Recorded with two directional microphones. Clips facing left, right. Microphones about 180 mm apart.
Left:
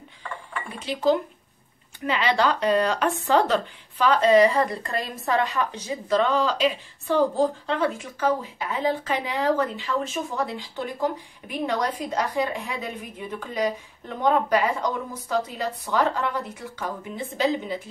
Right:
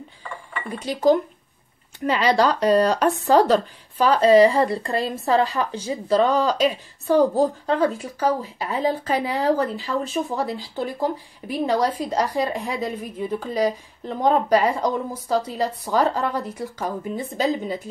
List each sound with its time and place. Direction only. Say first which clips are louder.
2.0 s speech: right 4 dB; 40° right (ahead or behind)